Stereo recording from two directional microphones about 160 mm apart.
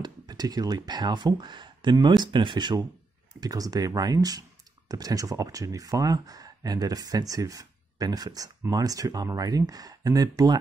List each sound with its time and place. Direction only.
0.0 s speech: 25° right (ahead or behind)